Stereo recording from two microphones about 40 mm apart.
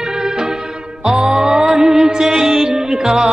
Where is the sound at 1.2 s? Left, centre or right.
Centre.